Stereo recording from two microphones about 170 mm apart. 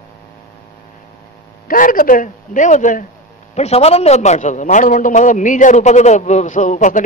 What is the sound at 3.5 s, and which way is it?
A man's voice, 40° left (ahead or behind).